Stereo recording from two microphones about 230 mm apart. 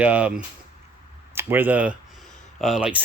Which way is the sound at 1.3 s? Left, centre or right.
Centre.